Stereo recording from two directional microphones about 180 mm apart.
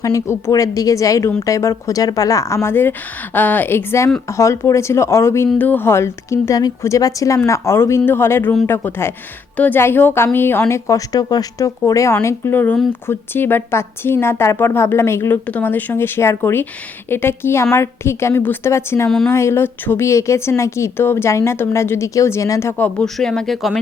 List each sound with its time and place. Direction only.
0.0 s a woman's voice: 15° left (ahead or behind)